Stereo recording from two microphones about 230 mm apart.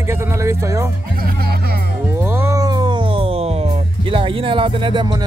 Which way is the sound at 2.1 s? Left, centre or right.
Centre.